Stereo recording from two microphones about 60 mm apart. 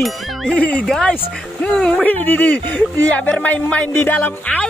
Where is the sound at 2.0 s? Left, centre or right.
Left.